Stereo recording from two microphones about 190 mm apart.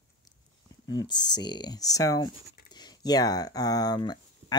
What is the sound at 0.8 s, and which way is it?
Speech, 20° left (ahead or behind).